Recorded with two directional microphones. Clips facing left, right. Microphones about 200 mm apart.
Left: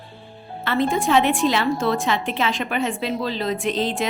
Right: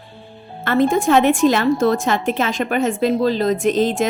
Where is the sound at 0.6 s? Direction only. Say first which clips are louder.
Right 5 dB; 45° right (ahead or behind).